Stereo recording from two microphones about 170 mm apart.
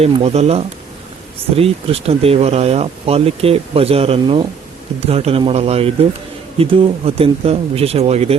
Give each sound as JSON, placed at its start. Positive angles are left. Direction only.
{"t": 0.0, "sound": "speech", "side_deg": -40}